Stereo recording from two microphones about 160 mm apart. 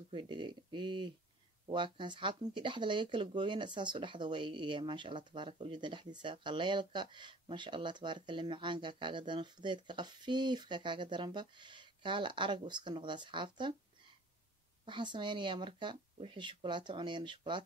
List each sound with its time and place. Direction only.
0.1 s speech: 30° right (ahead or behind)